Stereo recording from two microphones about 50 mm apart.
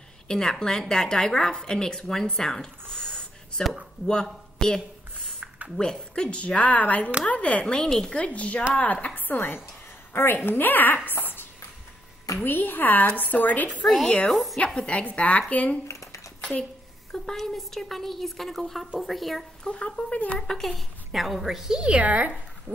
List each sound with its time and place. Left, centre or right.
0.3 s a woman's voice: centre
2.3 s a sound: centre
5.8 s speech: centre
7.6 s a woman's voice: centre
8.4 s speech: left
9.3 s a woman's voice: left
12.4 s a woman's voice: left
13.8 s a woman's voice: centre
14.8 s speech: left
15.9 s a sound: left
17.1 s a woman's voice: centre
19.6 s speech: left
20.3 s a woman's voice: centre; by 22.3 s right